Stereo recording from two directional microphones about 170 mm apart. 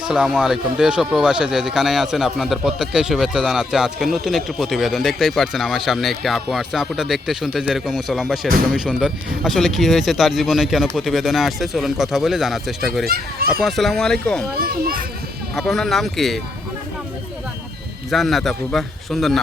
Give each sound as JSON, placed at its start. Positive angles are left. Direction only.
{"t": 0.1, "sound": "speech", "side_deg": -5}
{"t": 14.6, "sound": "a child's voice", "side_deg": -60}
{"t": 15.5, "sound": "speech", "side_deg": 0}
{"t": 18.1, "sound": "speech", "side_deg": 0}